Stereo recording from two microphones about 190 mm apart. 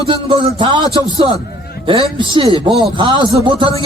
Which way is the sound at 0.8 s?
20° left (ahead or behind).